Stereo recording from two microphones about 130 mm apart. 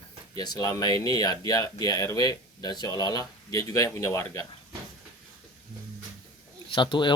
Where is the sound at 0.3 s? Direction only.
30° left (ahead or behind).